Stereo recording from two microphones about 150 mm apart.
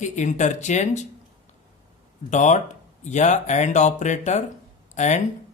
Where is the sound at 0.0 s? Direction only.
55° left (ahead or behind).